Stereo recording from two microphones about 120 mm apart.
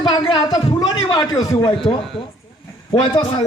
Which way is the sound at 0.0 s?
40° left (ahead or behind).